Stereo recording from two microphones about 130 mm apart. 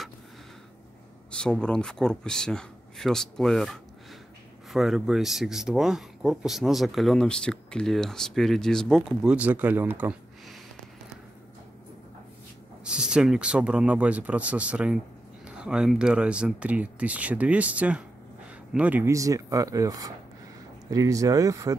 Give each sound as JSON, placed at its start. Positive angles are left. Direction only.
{"t": 1.3, "sound": "speech", "side_deg": 5}
{"t": 12.8, "sound": "speech", "side_deg": -5}
{"t": 19.1, "sound": "speech", "side_deg": -25}